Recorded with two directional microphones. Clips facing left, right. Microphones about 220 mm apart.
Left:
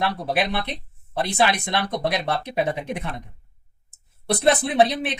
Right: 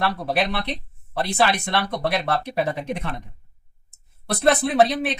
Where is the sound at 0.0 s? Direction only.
15° left (ahead or behind).